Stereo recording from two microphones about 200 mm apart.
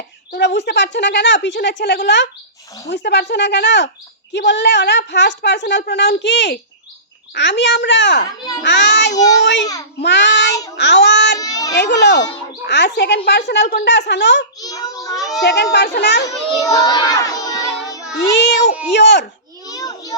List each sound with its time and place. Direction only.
0.3 s speech: 60° left (ahead or behind)
10.8 s child singing: 60° left (ahead or behind)
11.3 s a sound: 15° left (ahead or behind)
11.7 s speech: 60° left (ahead or behind)
14.6 s child singing: 20° left (ahead or behind)
15.4 s speech: 60° left (ahead or behind)
16.2 s a child's voice: 15° left (ahead or behind)
18.3 s a sound: 60° left (ahead or behind)
18.9 s speech: 60° left (ahead or behind)
19.6 s a sound: 20° left (ahead or behind)